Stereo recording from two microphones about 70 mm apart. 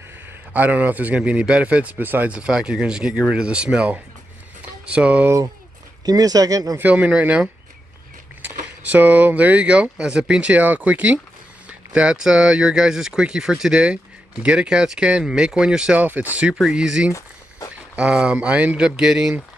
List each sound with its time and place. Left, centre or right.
0.5 s a man's voice: right
6.0 s speech: right
6.8 s a man's voice: right
16.0 s speech: right
16.7 s a man's voice: centre
18.9 s speech: centre